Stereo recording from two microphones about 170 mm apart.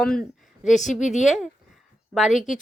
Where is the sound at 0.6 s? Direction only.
45° left (ahead or behind).